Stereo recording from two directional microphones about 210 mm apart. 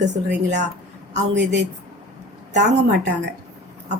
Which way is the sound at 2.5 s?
35° right (ahead or behind).